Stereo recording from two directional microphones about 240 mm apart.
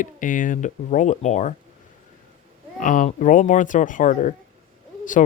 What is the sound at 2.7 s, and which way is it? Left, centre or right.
Speech, left.